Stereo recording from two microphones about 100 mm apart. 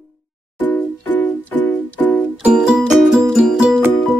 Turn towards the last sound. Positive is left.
turn(degrees=-5)  # may be behind; listen again after turning